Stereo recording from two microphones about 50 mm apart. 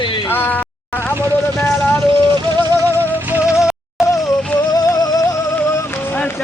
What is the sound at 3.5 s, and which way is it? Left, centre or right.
Music, centre.